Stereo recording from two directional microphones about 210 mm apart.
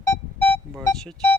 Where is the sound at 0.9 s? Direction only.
5° left (ahead or behind).